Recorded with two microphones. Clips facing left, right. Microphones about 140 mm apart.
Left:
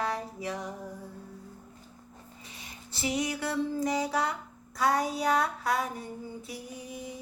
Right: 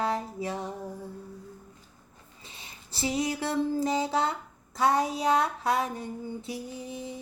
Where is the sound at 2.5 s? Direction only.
30° right (ahead or behind).